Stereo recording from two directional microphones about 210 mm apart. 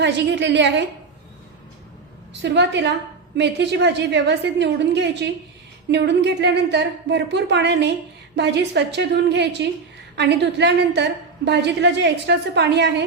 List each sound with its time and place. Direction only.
0.0 s a woman's voice: 55° right (ahead or behind)
2.3 s a woman's voice: 55° right (ahead or behind)